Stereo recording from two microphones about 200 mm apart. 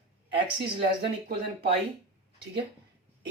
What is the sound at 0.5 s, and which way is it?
Speech, 55° right (ahead or behind).